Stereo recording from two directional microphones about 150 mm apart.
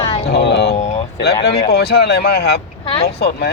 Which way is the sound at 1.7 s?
90° left.